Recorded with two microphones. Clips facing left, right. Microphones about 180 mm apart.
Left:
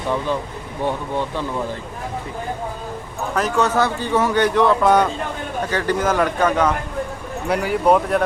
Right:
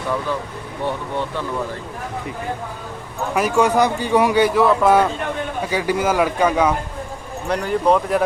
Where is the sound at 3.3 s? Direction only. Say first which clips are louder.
Right 2 dB; 10° right (ahead or behind).